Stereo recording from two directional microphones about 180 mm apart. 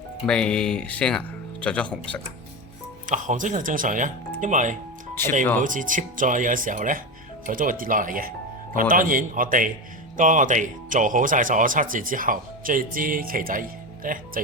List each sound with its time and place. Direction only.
0.3 s speech: 5° left (ahead or behind)
3.1 s speech: 45° right (ahead or behind)
5.2 s speech: 15° left (ahead or behind)
5.5 s speech: 45° right (ahead or behind)